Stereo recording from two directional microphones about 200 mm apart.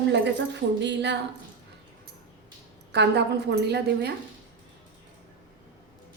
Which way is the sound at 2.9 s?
55° right (ahead or behind).